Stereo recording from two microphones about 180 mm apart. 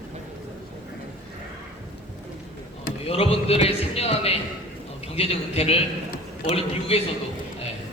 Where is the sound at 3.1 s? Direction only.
35° left (ahead or behind).